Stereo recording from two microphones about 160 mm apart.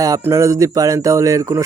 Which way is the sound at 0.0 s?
20° right (ahead or behind).